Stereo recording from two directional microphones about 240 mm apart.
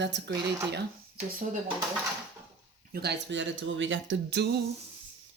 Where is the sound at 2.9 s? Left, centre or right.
Right.